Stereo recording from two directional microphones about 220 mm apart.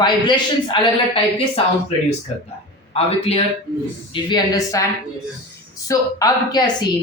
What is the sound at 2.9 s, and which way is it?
A man's voice, 25° left (ahead or behind).